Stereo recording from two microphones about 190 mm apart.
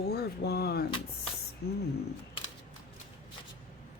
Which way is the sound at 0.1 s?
55° left (ahead or behind).